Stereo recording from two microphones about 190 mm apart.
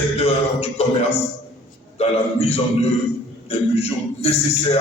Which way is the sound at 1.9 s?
35° left (ahead or behind).